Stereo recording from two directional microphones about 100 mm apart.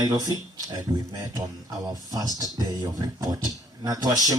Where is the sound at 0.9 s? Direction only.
45° right (ahead or behind).